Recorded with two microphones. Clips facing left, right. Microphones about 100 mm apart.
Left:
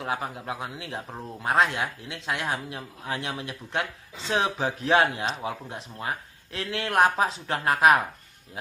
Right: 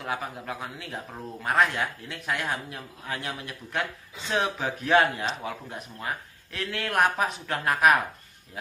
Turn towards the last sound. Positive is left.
turn(degrees=25)  # may be behind; listen again after turning